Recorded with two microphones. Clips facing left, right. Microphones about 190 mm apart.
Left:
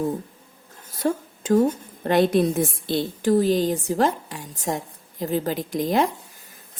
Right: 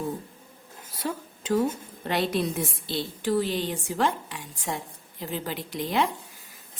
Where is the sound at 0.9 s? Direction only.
45° left (ahead or behind).